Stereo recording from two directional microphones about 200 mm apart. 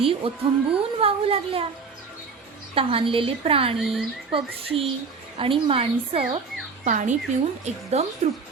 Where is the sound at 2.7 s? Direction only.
25° right (ahead or behind).